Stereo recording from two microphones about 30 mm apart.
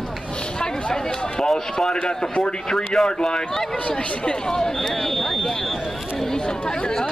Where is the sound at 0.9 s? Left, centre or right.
Left.